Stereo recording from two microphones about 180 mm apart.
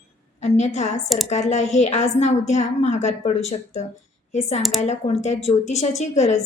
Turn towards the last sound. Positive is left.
turn(degrees=40)  # may be behind; listen again after turning